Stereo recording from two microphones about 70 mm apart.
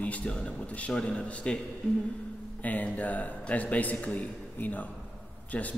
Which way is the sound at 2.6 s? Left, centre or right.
Left.